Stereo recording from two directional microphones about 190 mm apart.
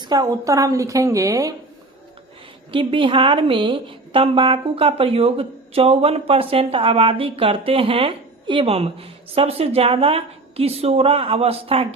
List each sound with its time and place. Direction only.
0.0 s a woman's voice: 20° right (ahead or behind)
2.7 s a woman's voice: 25° right (ahead or behind)